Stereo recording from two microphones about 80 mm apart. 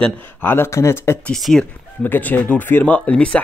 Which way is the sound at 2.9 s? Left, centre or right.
Centre.